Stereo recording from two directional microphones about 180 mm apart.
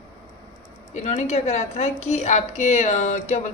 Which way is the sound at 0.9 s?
35° left (ahead or behind).